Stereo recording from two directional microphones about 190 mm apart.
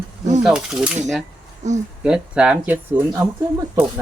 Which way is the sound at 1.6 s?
40° right (ahead or behind).